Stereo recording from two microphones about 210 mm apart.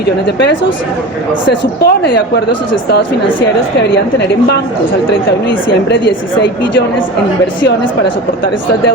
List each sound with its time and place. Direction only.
0.3 s a woman's voice: 55° left (ahead or behind)